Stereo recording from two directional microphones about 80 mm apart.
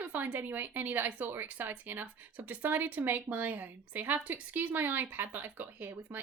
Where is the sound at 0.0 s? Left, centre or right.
Right.